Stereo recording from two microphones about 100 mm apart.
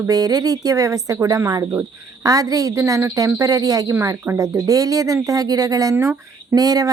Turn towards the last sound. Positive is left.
turn(degrees=-40)  # may be behind; listen again after turning